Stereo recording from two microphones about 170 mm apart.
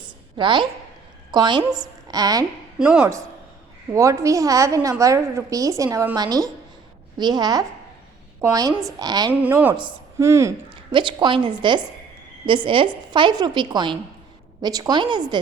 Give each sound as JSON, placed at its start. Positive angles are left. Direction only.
{"t": 0.3, "sound": "a woman's voice", "side_deg": -30}
{"t": 2.7, "sound": "speech", "side_deg": -5}
{"t": 3.9, "sound": "a woman's voice", "side_deg": -15}
{"t": 9.4, "sound": "a woman's voice", "side_deg": -10}
{"t": 10.7, "sound": "a woman's voice", "side_deg": -30}